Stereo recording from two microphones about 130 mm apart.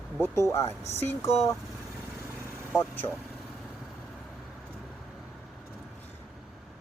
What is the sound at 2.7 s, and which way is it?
Speech, 15° left (ahead or behind).